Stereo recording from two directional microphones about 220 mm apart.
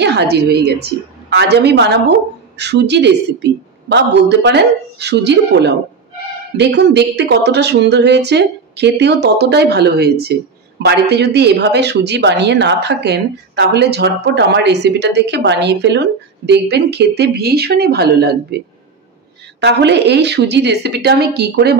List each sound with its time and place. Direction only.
0.0 s a woman's voice: 50° right (ahead or behind)